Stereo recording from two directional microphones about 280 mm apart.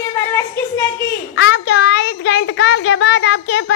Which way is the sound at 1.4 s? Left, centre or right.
Left.